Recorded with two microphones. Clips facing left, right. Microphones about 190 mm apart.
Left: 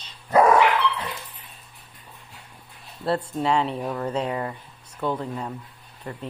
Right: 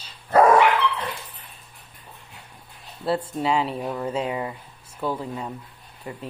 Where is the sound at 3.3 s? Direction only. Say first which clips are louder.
Even; 5° right (ahead or behind).